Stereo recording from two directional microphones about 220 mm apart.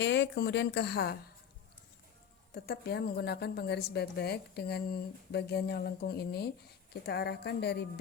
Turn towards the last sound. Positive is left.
turn(degrees=50)  # may be behind; listen again after turning